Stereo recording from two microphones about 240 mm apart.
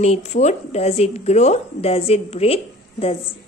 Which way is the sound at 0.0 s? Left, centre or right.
Left.